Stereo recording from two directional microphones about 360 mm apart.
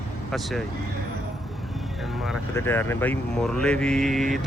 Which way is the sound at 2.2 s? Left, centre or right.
Centre.